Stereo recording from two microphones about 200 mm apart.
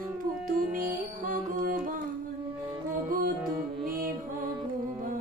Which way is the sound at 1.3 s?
45° right (ahead or behind).